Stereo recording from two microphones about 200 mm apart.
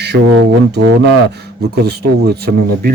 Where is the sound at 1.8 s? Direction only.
55° right (ahead or behind).